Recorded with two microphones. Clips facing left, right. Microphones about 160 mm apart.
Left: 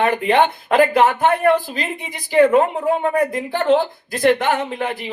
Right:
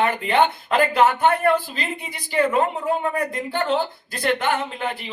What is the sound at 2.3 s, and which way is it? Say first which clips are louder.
Speech: left 7 dB; 40° left (ahead or behind).